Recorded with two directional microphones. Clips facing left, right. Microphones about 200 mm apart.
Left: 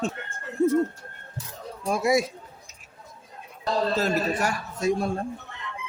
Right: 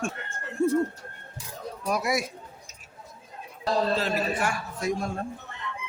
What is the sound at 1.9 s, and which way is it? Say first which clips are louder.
Speech: left 5 dB; 25° left (ahead or behind).